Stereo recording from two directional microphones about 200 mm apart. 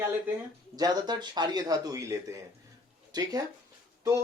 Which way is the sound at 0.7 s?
20° right (ahead or behind).